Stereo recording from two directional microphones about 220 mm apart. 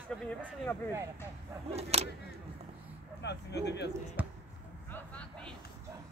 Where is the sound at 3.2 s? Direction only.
50° left (ahead or behind).